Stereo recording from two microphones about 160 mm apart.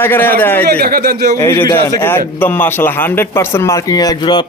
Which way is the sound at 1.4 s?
15° left (ahead or behind).